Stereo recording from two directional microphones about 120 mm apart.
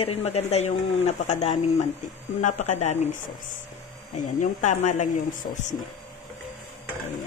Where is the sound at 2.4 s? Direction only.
75° left (ahead or behind).